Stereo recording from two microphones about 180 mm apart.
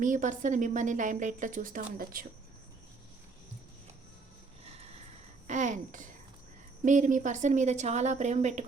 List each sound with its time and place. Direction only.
0.0 s a woman's voice: 45° right (ahead or behind)
4.6 s a sound: 35° right (ahead or behind)
5.5 s a woman's voice: 45° right (ahead or behind)